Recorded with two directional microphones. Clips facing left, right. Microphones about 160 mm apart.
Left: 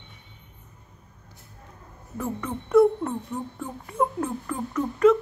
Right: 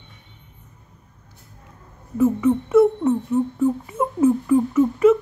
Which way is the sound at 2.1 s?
5° right (ahead or behind).